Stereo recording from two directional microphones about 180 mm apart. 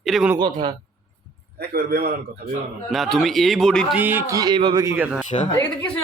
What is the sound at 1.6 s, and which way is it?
Speech, 60° right (ahead or behind).